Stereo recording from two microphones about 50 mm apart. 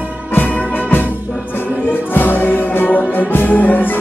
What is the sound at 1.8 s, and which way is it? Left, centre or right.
Music, left.